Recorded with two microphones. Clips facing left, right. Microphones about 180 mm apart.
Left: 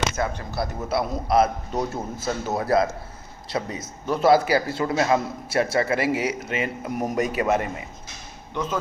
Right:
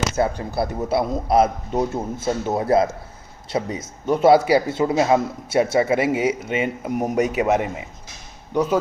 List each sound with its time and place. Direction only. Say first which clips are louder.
0.2 s a man's voice: right 5 dB; 30° right (ahead or behind)